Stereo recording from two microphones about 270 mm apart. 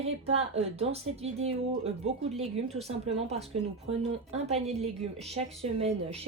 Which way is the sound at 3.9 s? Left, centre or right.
Right.